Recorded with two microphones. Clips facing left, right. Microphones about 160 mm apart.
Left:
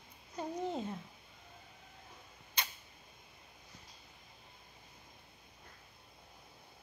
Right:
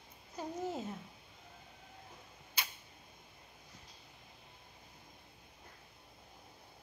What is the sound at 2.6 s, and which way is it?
Camera, 5° right (ahead or behind).